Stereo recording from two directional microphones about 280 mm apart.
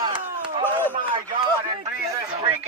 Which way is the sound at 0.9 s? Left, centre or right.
Centre.